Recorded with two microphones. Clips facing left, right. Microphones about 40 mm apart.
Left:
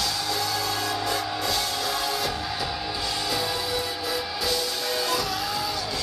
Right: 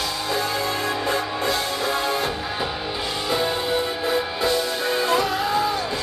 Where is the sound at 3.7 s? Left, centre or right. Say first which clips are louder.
Right 6 dB; right.